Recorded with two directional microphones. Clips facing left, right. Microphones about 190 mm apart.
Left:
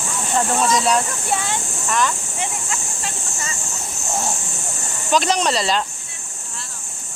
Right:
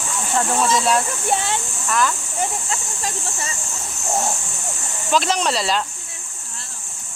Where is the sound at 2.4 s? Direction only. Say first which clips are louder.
Right 4 dB; 35° right (ahead or behind).